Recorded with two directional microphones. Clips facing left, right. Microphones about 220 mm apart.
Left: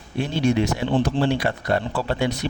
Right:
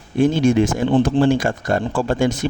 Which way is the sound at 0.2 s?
50° right (ahead or behind).